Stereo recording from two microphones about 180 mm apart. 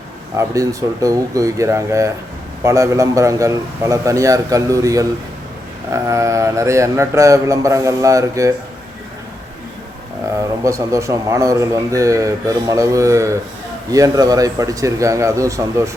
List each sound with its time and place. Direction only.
0.3 s speech: 20° right (ahead or behind)
10.6 s speech: 15° right (ahead or behind)